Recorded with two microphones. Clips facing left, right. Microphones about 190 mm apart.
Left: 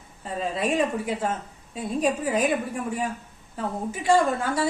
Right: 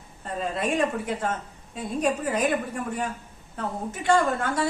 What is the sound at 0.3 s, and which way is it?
A woman's voice, centre (ahead or behind).